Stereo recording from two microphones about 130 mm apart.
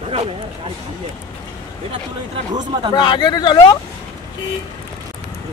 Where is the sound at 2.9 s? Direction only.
35° left (ahead or behind).